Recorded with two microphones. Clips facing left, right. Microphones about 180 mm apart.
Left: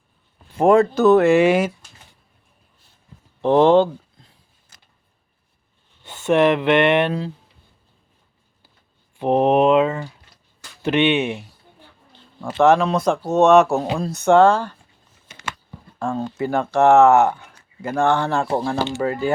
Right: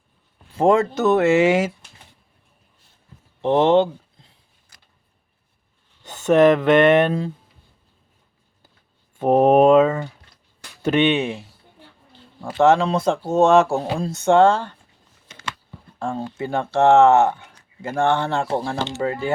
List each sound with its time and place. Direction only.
0.5 s speech: 25° right (ahead or behind)
3.4 s speech: 20° right (ahead or behind)
6.0 s speech: 45° right (ahead or behind)
9.1 s speech: 45° right (ahead or behind)
12.5 s speech: 25° right (ahead or behind)
15.3 s a sound: 5° left (ahead or behind)
16.0 s speech: 25° right (ahead or behind)